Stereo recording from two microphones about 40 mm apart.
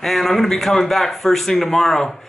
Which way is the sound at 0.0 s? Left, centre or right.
Centre.